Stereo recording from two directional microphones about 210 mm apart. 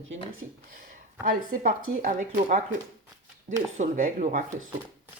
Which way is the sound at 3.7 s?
35° right (ahead or behind).